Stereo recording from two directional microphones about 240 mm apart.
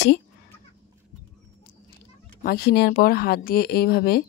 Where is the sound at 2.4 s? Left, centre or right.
Left.